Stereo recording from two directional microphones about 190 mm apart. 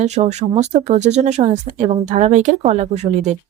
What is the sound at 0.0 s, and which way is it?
Speech, 35° right (ahead or behind).